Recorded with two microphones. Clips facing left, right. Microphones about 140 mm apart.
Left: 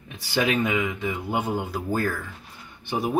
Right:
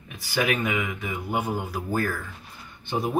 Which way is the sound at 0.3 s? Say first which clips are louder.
Left 2 dB; 25° left (ahead or behind).